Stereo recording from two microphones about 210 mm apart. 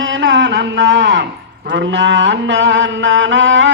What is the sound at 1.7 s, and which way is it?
Mantra, 60° right (ahead or behind).